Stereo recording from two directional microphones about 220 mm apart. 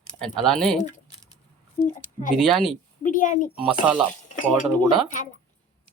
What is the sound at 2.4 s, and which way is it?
Speech, centre (ahead or behind).